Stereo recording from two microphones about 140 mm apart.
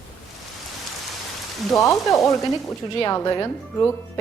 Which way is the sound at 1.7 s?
25° left (ahead or behind).